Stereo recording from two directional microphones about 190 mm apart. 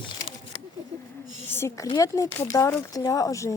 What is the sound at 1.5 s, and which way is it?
Speech, 15° left (ahead or behind).